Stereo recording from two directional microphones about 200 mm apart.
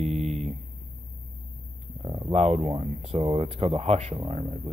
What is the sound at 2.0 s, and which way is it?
Speech, 20° right (ahead or behind).